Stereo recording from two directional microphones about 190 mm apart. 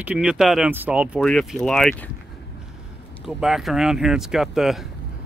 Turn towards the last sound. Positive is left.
turn(degrees=0)  # may be behind; listen again after turning